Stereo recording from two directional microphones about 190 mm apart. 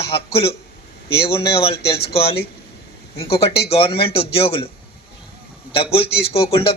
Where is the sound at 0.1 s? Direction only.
30° left (ahead or behind).